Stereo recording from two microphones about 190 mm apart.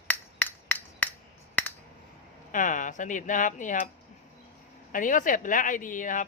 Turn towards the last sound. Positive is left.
turn(degrees=45)  # may be behind; listen again after turning